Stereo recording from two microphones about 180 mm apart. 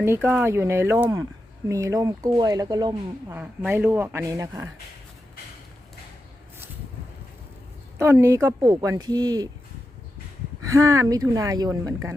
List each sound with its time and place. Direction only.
0.0 s speech: 10° right (ahead or behind)
3.3 s speech: 10° right (ahead or behind)
7.9 s speech: 15° right (ahead or behind)
10.6 s speech: 15° right (ahead or behind)